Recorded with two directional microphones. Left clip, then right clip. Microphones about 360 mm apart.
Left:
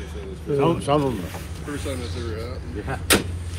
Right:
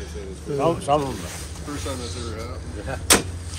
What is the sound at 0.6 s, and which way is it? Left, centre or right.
Speech, left.